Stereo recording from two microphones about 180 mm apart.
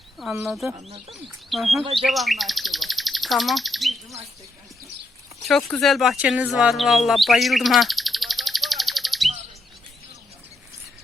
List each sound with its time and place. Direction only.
0.4 s speech: centre (ahead or behind)
0.8 s speech: 35° right (ahead or behind)
1.5 s speech: centre (ahead or behind)
2.0 s bird: centre (ahead or behind)
5.4 s speech: centre (ahead or behind)